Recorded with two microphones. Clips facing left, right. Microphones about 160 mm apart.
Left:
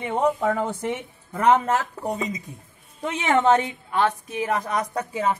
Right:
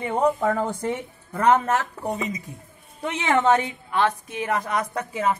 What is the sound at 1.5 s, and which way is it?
Speech, 20° left (ahead or behind).